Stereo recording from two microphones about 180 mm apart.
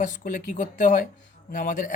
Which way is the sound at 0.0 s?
45° left (ahead or behind).